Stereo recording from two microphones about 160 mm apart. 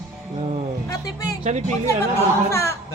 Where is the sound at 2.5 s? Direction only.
15° left (ahead or behind).